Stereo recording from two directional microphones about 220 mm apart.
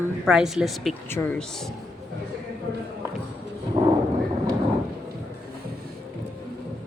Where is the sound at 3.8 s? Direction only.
30° right (ahead or behind).